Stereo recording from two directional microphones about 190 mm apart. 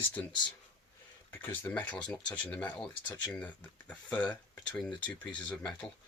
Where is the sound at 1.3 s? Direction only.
10° left (ahead or behind).